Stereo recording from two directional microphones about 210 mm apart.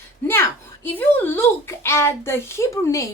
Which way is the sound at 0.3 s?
10° left (ahead or behind).